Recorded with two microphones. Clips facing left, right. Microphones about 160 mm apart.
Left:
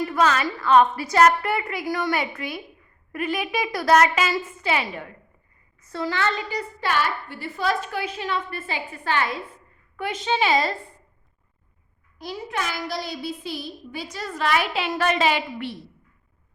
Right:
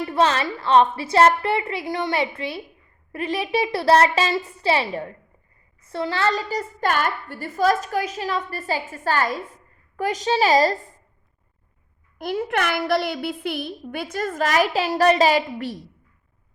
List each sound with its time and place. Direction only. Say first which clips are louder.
0.0 s a woman's voice: right 1 dB; 30° right (ahead or behind)
12.2 s a woman's voice: right 6 dB; 55° right (ahead or behind)